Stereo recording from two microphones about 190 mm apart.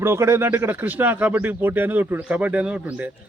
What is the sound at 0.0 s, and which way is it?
Speech, 15° right (ahead or behind).